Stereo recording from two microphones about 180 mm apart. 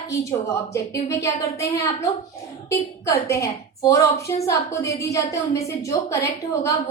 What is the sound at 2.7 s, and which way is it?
A woman's voice, 15° left (ahead or behind).